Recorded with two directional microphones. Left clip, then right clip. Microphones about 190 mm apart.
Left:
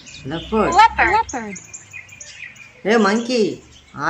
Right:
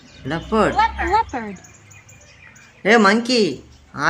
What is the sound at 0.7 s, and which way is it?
Speech, 45° left (ahead or behind).